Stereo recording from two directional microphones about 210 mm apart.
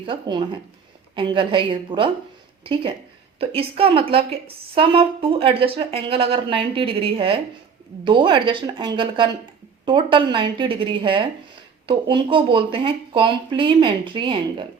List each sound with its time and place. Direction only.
0.0 s speech: 25° right (ahead or behind)
3.5 s speech: 25° right (ahead or behind)